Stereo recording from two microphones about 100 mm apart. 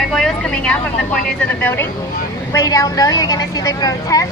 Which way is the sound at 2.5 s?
35° left (ahead or behind).